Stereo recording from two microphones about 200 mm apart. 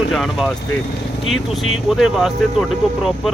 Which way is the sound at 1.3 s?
Centre (ahead or behind).